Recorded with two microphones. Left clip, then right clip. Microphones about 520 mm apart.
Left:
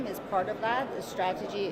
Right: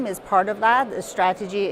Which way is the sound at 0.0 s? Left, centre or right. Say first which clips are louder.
Right 10 dB; right.